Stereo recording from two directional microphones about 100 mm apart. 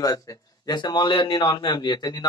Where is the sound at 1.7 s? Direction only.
45° left (ahead or behind).